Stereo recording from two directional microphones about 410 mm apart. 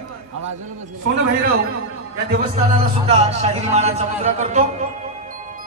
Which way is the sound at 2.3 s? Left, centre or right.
Centre.